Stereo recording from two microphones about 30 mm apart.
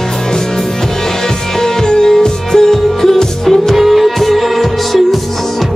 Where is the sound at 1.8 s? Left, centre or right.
Left.